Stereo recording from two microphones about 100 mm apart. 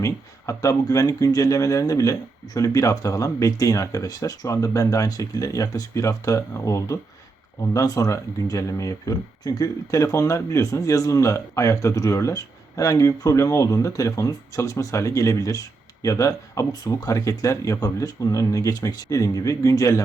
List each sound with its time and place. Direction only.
0.0 s speech: 35° left (ahead or behind)